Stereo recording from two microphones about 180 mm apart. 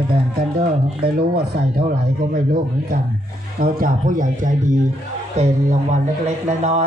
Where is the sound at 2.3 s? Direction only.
50° right (ahead or behind).